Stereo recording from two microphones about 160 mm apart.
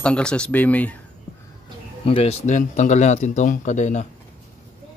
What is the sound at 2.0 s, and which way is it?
A man's voice, 40° left (ahead or behind).